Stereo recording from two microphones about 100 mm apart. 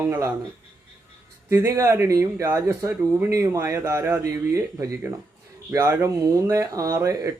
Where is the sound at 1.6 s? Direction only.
35° right (ahead or behind).